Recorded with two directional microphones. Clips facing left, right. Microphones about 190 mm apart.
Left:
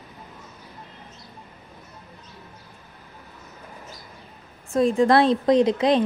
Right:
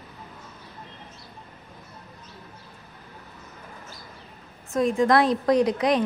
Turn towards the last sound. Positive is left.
turn(degrees=25)  # may be behind; listen again after turning